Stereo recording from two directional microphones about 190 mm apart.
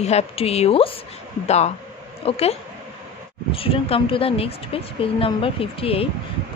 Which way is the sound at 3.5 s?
30° left (ahead or behind).